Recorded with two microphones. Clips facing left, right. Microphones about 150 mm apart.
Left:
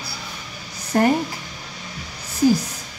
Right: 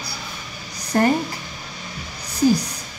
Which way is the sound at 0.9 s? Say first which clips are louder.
Even; 10° left (ahead or behind).